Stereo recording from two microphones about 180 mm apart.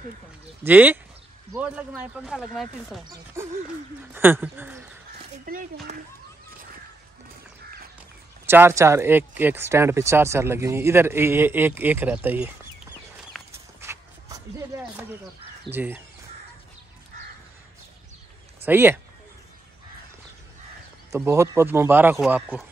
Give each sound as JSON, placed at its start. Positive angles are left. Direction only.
{"t": 0.7, "sound": "speech", "side_deg": -10}
{"t": 3.4, "sound": "speech", "side_deg": -15}
{"t": 5.4, "sound": "speech", "side_deg": -50}
{"t": 5.9, "sound": "a child's voice", "side_deg": -40}
{"t": 8.5, "sound": "speech", "side_deg": -15}
{"t": 13.4, "sound": "horse", "side_deg": 0}
{"t": 13.7, "sound": "a sound", "side_deg": -15}
{"t": 15.7, "sound": "speech", "side_deg": -10}
{"t": 18.7, "sound": "speech", "side_deg": -10}
{"t": 21.2, "sound": "speech", "side_deg": -15}